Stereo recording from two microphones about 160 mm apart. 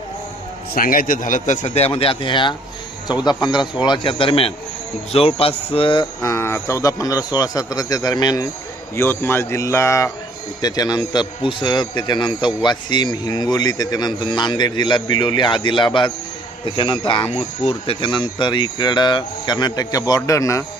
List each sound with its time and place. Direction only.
0.7 s speech: 60° left (ahead or behind); by 6.1 s 30° left (ahead or behind)
6.2 s speech: 15° left (ahead or behind)
9.0 s speech: 15° left (ahead or behind); by 17.2 s 30° left (ahead or behind)
17.3 s speech: 40° left (ahead or behind); by 20.7 s 20° left (ahead or behind)